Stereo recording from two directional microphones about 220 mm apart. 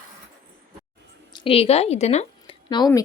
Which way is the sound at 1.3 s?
25° left (ahead or behind).